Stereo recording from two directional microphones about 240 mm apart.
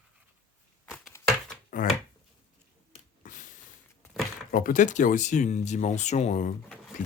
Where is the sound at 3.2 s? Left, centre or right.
Left.